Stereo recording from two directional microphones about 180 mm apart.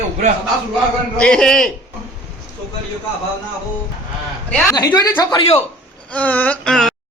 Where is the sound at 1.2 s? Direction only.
5° left (ahead or behind).